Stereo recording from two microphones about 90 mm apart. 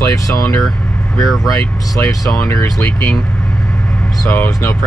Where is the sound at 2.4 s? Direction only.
30° left (ahead or behind).